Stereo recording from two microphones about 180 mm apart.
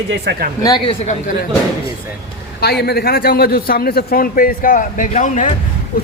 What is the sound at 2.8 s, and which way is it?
A man's voice, 60° left (ahead or behind).